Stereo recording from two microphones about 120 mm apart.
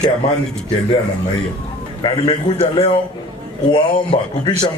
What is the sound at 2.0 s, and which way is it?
A man's voice, 45° left (ahead or behind).